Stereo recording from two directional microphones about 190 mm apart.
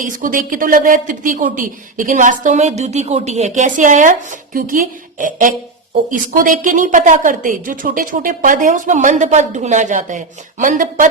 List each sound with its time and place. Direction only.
0.0 s speech: 45° right (ahead or behind)